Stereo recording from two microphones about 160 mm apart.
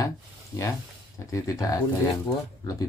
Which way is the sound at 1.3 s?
20° left (ahead or behind).